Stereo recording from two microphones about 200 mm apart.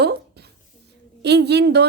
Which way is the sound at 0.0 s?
55° right (ahead or behind).